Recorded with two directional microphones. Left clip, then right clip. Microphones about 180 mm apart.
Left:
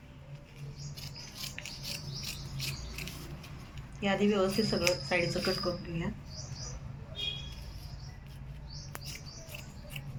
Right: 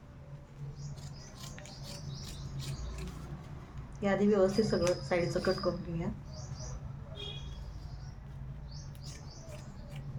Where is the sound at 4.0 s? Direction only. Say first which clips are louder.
Right 1 dB; 20° right (ahead or behind).